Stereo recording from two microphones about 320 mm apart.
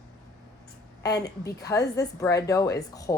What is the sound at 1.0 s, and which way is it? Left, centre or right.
A woman's voice, centre.